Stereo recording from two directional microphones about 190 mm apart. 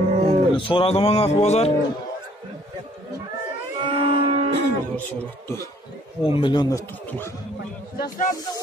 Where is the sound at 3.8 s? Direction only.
25° right (ahead or behind).